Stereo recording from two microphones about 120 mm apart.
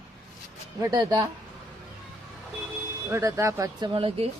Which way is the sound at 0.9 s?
35° right (ahead or behind).